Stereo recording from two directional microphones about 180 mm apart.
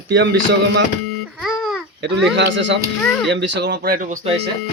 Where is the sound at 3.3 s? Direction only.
75° right (ahead or behind); by 4.1 s 50° right (ahead or behind).